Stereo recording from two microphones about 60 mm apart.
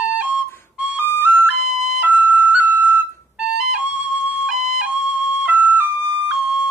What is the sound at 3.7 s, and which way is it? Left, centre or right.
Flute, centre.